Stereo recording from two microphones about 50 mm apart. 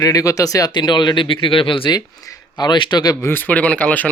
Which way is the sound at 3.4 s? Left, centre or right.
Left.